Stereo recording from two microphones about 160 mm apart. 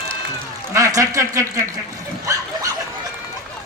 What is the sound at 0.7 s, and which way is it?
Speech, 20° right (ahead or behind).